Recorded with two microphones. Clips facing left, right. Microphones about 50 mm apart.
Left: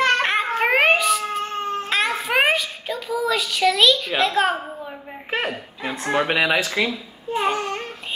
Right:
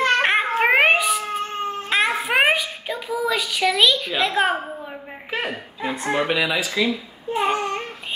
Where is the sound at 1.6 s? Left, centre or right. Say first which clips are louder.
Right 2 dB; centre.